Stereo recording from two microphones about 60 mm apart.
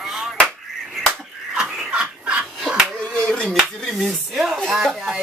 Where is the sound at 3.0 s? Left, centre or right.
Centre.